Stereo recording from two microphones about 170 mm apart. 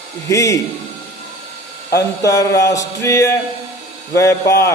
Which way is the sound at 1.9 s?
20° left (ahead or behind).